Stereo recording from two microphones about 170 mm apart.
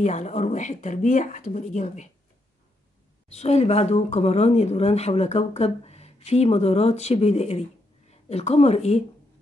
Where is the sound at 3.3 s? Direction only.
40° left (ahead or behind).